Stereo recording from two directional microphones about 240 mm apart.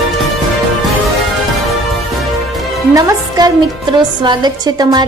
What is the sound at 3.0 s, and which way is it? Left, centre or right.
A woman's voice, centre.